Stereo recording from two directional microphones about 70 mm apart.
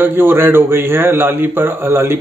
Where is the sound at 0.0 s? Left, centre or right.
Right.